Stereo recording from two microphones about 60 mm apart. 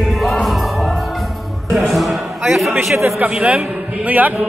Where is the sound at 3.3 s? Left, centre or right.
Right.